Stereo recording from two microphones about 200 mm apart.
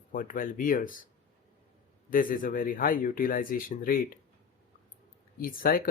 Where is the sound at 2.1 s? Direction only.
45° left (ahead or behind).